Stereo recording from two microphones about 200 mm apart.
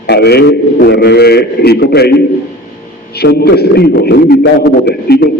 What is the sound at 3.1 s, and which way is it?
A man's voice, 55° left (ahead or behind).